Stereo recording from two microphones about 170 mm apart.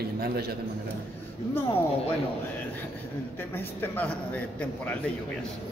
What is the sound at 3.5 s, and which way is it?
A man's voice, 10° left (ahead or behind).